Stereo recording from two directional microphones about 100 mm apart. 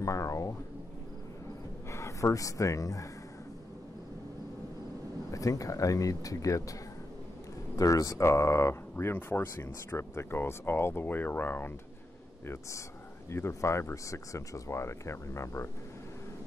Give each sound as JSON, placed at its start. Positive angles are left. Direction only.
{"t": 0.0, "sound": "speech", "side_deg": 30}
{"t": 1.9, "sound": "speech", "side_deg": 30}
{"t": 5.3, "sound": "speech", "side_deg": 35}
{"t": 7.7, "sound": "speech", "side_deg": 35}
{"t": 13.3, "sound": "speech", "side_deg": 25}